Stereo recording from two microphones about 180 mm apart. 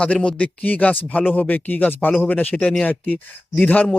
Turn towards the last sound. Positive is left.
turn(degrees=10)  # may be behind; listen again after turning